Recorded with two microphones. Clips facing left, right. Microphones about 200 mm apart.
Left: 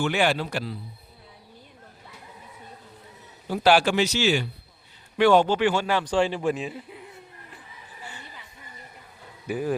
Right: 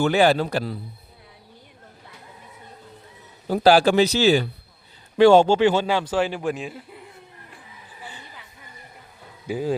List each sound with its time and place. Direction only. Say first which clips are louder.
0.0 s speech: right 6 dB; 35° right (ahead or behind)
3.4 s speech: right 4 dB; 40° right (ahead or behind); by 6.1 s 15° right (ahead or behind)
6.1 s speech: even; centre (ahead or behind)
8.0 s a sound: right 1 dB; 15° right (ahead or behind)
9.5 s speech: right 2 dB; 15° right (ahead or behind)